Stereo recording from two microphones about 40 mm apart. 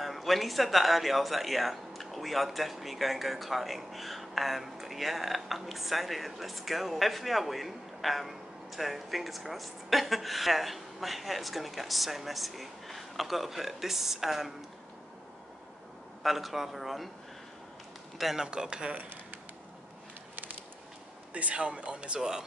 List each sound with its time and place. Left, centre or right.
0.0 s speech: centre
16.2 s speech: centre
18.1 s a man's voice: centre
18.5 s speech: right
21.3 s speech: right